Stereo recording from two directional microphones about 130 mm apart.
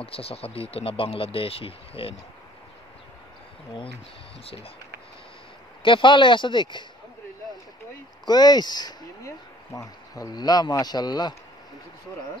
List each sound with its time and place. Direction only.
0.0 s speech: 50° left (ahead or behind)
5.8 s speech: 40° left (ahead or behind)
8.3 s speech: 30° left (ahead or behind)